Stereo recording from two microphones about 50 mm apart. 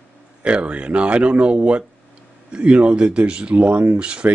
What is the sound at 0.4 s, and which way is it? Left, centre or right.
Speech, right.